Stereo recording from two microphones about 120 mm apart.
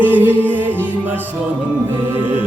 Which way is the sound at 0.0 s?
15° right (ahead or behind).